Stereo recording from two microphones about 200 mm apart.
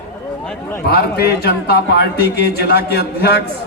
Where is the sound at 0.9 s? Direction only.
55° left (ahead or behind).